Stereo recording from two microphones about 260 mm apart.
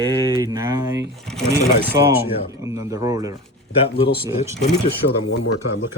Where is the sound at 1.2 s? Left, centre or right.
Centre.